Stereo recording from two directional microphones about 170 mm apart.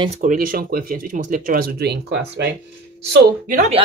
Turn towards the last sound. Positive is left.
turn(degrees=-45)  # may be behind; listen again after turning